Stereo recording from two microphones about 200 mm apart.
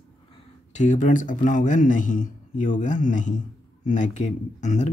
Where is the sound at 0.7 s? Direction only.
35° left (ahead or behind).